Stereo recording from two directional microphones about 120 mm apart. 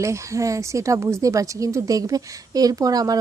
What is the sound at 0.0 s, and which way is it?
Speech, 25° right (ahead or behind).